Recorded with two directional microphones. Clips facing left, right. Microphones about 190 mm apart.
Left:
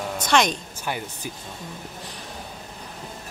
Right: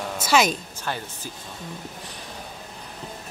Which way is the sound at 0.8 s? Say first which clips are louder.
Left 2 dB; 15° left (ahead or behind).